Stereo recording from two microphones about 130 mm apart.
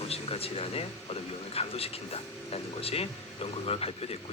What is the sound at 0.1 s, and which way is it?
A man's voice, 50° left (ahead or behind).